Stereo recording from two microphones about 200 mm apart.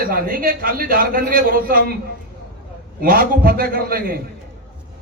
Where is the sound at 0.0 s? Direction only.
45° right (ahead or behind).